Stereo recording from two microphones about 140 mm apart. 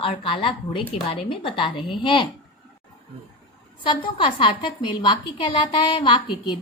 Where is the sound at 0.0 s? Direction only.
40° left (ahead or behind).